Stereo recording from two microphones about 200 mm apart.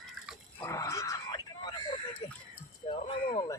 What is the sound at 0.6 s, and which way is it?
Grunt, 15° left (ahead or behind).